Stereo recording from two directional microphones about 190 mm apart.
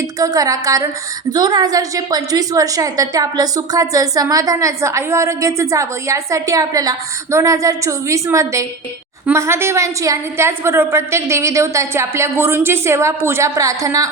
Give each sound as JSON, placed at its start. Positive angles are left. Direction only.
{"t": 0.2, "sound": "a woman's voice", "side_deg": -20}